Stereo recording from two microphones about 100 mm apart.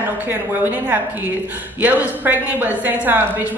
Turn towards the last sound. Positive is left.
turn(degrees=-15)  # may be behind; listen again after turning